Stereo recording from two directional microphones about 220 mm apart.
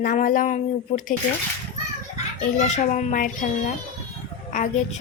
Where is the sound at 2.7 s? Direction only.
35° left (ahead or behind).